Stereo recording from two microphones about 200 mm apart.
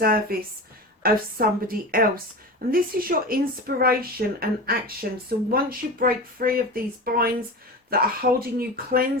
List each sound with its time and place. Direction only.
0.0 s speech: 50° right (ahead or behind)